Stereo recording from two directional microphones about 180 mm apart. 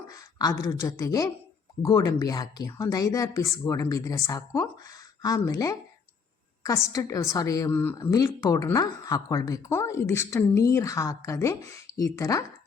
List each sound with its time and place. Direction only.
0.1 s a woman's voice: 20° left (ahead or behind)